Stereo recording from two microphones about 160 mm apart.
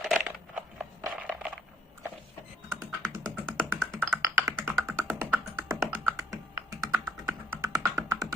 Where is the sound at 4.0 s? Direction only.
15° right (ahead or behind).